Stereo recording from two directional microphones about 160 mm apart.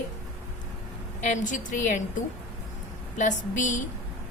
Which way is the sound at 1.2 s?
50° left (ahead or behind).